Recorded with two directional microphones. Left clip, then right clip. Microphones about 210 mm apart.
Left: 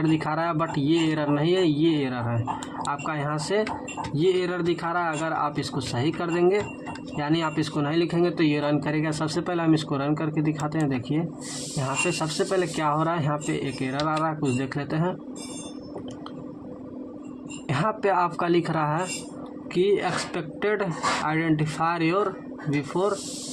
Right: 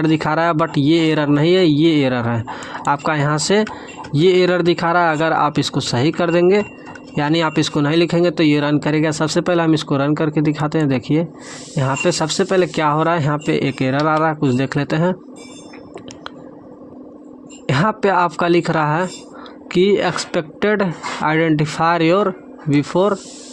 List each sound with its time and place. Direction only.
0.0 s speech: 35° right (ahead or behind)
17.7 s speech: 40° right (ahead or behind)